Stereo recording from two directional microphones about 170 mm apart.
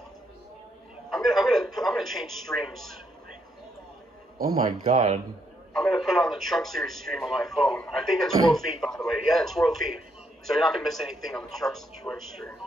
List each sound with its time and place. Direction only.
1.1 s a man's voice: centre (ahead or behind)
4.8 s speech: 35° right (ahead or behind)
5.7 s a man's voice: centre (ahead or behind)